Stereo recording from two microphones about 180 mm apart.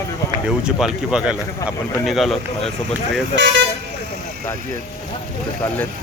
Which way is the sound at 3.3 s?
85° right.